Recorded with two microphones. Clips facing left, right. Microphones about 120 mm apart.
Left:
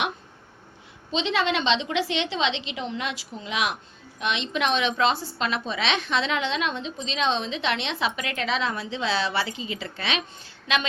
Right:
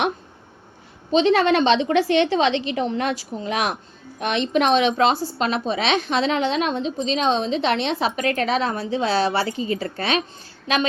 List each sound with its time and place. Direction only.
1.1 s a woman's voice: 50° right (ahead or behind)